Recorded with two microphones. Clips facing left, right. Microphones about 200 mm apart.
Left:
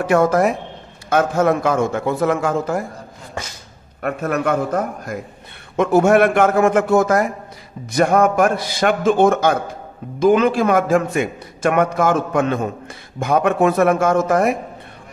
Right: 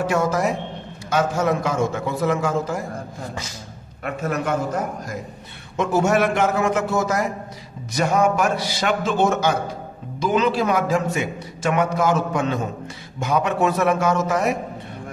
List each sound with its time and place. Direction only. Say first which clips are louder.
0.0 s a man's voice: left 5 dB; 55° left (ahead or behind)
4.0 s a man's voice: left 4 dB; 55° left (ahead or behind)